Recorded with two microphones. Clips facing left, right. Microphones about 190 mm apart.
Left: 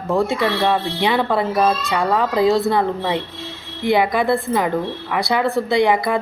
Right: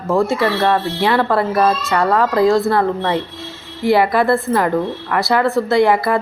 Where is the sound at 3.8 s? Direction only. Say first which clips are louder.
Right 3 dB; centre (ahead or behind).